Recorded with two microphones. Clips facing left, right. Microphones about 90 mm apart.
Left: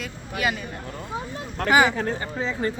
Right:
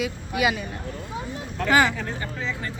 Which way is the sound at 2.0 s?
35° left (ahead or behind).